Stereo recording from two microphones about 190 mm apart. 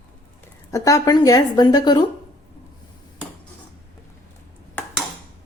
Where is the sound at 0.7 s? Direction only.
15° left (ahead or behind).